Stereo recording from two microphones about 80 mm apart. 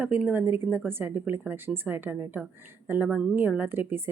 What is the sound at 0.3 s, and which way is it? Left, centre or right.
Speech, right.